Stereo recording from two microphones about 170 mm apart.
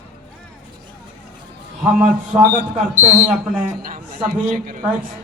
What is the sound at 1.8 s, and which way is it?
Speech, 5° right (ahead or behind).